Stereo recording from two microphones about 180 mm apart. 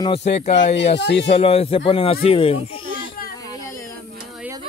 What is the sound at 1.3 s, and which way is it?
Speech, 35° left (ahead or behind).